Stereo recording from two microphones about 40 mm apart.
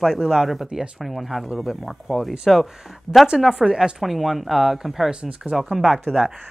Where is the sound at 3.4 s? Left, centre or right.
Centre.